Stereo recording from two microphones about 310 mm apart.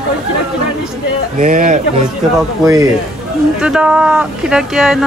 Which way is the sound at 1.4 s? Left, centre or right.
Right.